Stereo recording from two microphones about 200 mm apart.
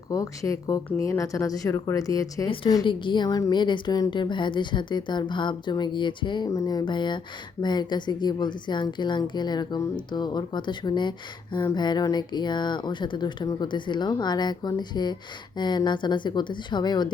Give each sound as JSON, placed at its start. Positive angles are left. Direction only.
{"t": 0.1, "sound": "speech", "side_deg": 15}